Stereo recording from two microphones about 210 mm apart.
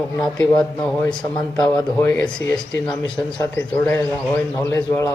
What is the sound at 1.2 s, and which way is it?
A man's voice, 20° left (ahead or behind).